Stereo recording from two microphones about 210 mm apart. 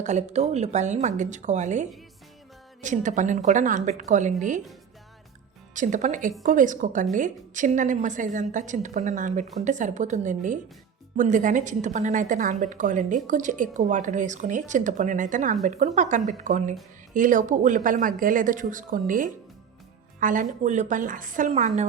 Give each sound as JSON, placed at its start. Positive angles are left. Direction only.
{"t": 0.0, "sound": "a woman's voice", "side_deg": -35}
{"t": 5.7, "sound": "a woman's voice", "side_deg": -35}